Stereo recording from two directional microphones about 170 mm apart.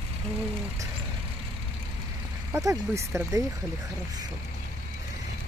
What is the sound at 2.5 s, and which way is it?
Speech, 20° right (ahead or behind).